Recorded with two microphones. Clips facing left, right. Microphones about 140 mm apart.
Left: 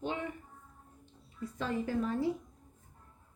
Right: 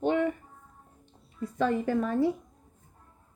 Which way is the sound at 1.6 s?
60° right (ahead or behind).